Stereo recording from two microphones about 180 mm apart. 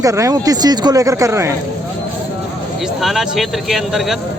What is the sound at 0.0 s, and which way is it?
Speech, 20° right (ahead or behind).